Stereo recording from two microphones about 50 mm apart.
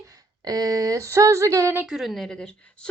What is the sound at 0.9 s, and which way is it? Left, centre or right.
Speech, right.